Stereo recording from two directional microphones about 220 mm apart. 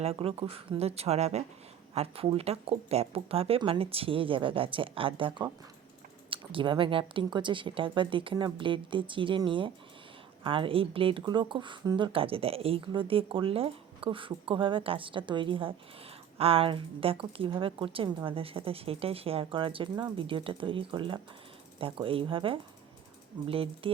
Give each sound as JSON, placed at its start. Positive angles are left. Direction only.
{"t": 0.0, "sound": "speech", "side_deg": -25}